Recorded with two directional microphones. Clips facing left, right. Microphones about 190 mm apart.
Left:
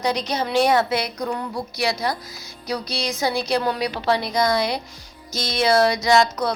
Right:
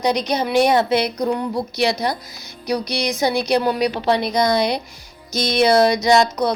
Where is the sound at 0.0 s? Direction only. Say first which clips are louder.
Right 4 dB; 15° right (ahead or behind).